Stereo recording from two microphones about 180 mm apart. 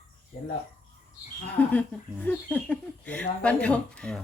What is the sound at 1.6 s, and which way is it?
Speech, 10° left (ahead or behind).